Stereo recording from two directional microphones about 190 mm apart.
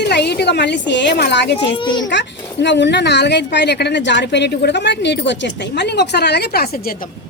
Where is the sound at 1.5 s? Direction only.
25° left (ahead or behind).